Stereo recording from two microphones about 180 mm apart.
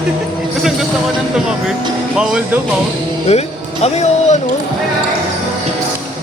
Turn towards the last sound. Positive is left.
turn(degrees=40)  # may be behind; listen again after turning